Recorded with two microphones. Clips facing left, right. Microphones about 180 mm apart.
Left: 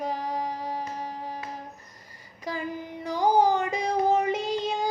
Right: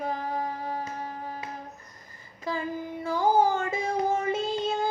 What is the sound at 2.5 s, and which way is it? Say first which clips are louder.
Child singing: right 1 dB; 15° left (ahead or behind).